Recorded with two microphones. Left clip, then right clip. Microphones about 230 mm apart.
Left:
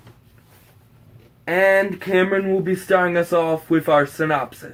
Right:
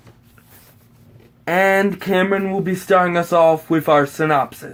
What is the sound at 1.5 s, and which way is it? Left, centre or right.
Speech, right.